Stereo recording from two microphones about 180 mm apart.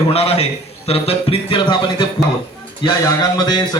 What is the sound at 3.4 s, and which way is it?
Speech, 25° left (ahead or behind).